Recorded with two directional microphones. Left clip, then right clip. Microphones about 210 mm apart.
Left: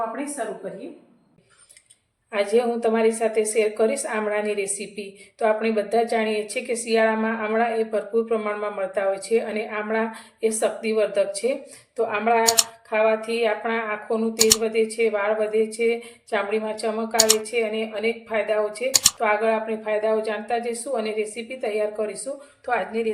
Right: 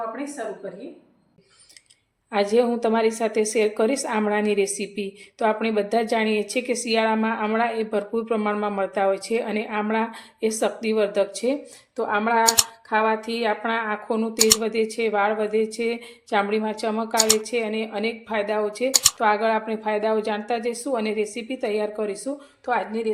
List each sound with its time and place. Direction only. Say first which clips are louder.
2.3 s a woman's voice: right 1 dB; 40° right (ahead or behind)
11.9 s speech: left 1 dB; 25° right (ahead or behind)
12.4 s speech: right 1 dB; centre (ahead or behind)
12.9 s a woman's voice: left 2 dB; 35° right (ahead or behind)
14.3 s speech: even; centre (ahead or behind)
14.6 s a woman's voice: left 2 dB; 40° right (ahead or behind)
17.2 s speech: left 1 dB; centre (ahead or behind)
17.5 s a woman's voice: left 1 dB; 40° right (ahead or behind)
18.9 s speech: even; centre (ahead or behind)
19.2 s a woman's voice: right 1 dB; 40° right (ahead or behind)
22.6 s speech: even; 30° right (ahead or behind)